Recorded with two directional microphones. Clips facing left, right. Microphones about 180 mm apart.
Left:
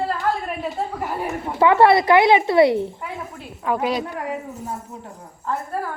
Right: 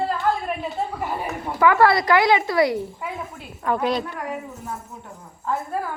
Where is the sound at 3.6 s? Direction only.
5° left (ahead or behind).